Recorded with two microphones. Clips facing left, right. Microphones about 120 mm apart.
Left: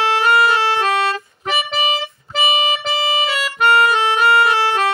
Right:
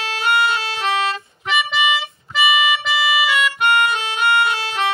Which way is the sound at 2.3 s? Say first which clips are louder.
Right 1 dB; 30° left (ahead or behind).